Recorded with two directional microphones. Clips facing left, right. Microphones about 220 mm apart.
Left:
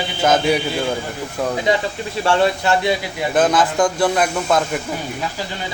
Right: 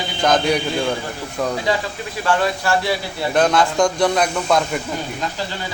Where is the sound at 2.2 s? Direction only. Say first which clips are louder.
Left 3 dB; 25° left (ahead or behind).